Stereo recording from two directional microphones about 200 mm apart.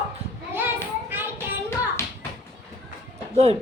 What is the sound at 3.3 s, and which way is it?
Speech, 30° right (ahead or behind).